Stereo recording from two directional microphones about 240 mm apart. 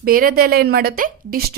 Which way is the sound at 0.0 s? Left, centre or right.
Right.